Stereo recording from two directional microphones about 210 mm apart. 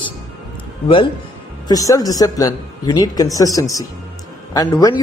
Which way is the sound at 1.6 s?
15° left (ahead or behind).